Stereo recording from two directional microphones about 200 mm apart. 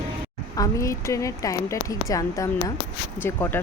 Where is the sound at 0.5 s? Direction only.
15° left (ahead or behind).